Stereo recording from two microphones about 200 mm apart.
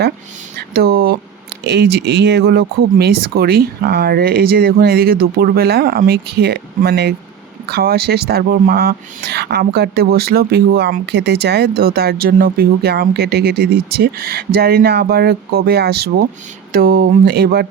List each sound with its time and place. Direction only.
0.5 s speech: 50° right (ahead or behind)